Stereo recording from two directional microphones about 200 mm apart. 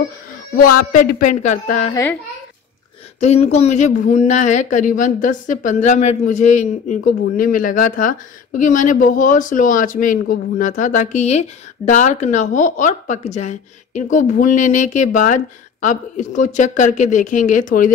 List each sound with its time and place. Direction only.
0.6 s speech: 45° left (ahead or behind)
3.2 s speech: 35° left (ahead or behind)